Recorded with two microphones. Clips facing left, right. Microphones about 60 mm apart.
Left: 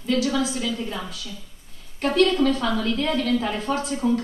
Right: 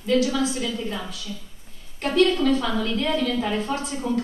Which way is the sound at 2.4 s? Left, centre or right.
Centre.